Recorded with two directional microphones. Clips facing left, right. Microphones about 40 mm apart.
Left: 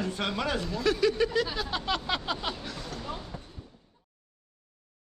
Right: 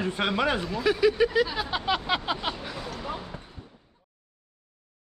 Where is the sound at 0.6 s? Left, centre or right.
Centre.